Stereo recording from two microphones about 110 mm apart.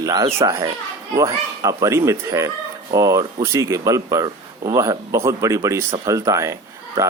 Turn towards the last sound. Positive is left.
turn(degrees=-30)  # may be behind; listen again after turning